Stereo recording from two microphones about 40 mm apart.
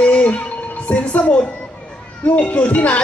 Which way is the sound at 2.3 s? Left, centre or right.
Left.